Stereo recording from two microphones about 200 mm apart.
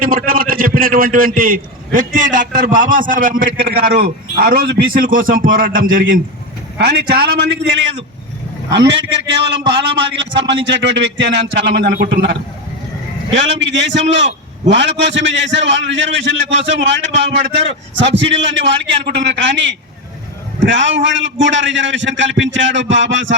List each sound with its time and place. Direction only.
0.0 s a man's voice: 45° right (ahead or behind)
6.7 s a man's voice: 60° right (ahead or behind)